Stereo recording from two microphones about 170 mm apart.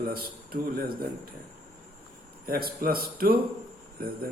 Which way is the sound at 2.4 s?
60° right (ahead or behind).